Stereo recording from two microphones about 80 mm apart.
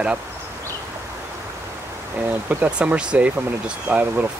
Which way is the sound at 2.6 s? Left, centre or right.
Centre.